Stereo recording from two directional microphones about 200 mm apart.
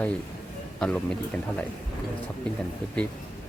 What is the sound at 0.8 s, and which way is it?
Speech, 5° left (ahead or behind).